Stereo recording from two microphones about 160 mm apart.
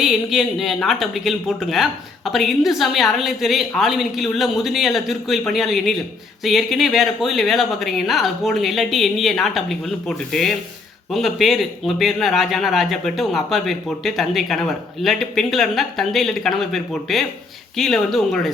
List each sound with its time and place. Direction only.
0.0 s speech: centre (ahead or behind)